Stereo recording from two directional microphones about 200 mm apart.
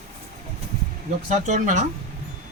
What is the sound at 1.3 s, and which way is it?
Speech, 40° right (ahead or behind).